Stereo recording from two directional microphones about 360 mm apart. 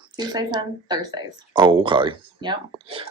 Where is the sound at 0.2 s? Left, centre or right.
Centre.